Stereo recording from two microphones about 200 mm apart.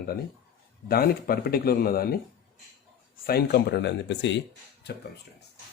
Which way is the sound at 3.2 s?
50° left (ahead or behind).